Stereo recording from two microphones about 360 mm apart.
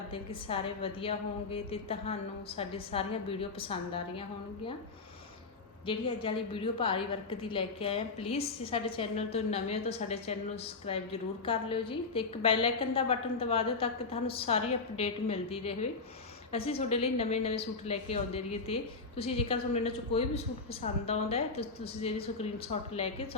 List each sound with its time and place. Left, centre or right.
0.1 s a woman's voice: centre
5.8 s a woman's voice: centre